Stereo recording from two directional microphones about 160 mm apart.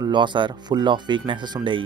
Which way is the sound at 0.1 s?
30° right (ahead or behind).